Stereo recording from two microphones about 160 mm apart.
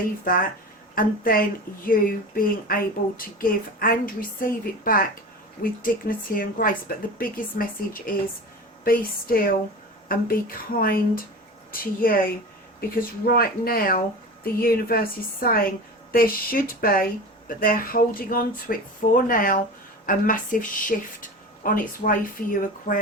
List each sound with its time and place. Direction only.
0.9 s a woman's voice: 65° left (ahead or behind)